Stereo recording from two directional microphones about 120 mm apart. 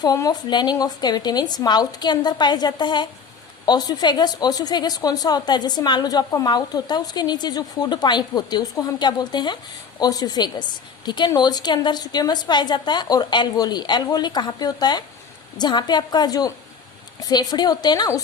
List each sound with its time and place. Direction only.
0.0 s a woman's voice: 30° left (ahead or behind)